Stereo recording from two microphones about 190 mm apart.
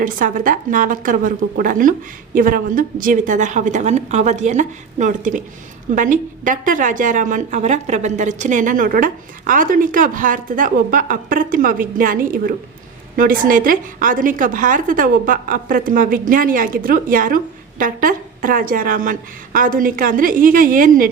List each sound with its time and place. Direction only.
0.0 s a woman's voice: 45° right (ahead or behind)